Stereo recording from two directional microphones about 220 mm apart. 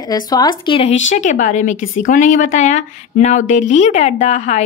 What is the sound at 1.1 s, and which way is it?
Speech, 35° left (ahead or behind).